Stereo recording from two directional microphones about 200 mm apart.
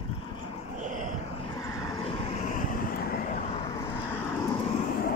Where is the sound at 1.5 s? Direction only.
15° left (ahead or behind); by 3.3 s 50° left (ahead or behind).